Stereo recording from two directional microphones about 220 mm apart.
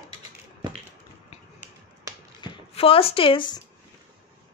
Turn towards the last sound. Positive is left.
turn(degrees=25)  # may be behind; listen again after turning